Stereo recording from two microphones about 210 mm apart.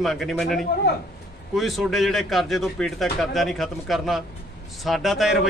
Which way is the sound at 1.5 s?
Centre (ahead or behind).